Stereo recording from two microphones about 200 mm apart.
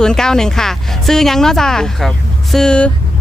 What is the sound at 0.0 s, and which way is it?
Speech, 5° left (ahead or behind).